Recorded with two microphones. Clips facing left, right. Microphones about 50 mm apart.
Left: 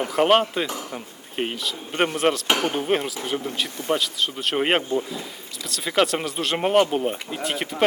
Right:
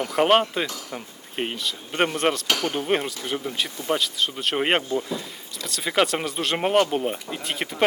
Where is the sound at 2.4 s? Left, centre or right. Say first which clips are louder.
Left 2 dB; left.